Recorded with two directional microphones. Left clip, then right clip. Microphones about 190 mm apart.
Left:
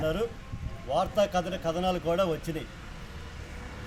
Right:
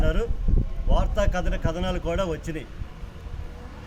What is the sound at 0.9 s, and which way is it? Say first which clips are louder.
A man's voice: left 1 dB; 25° right (ahead or behind).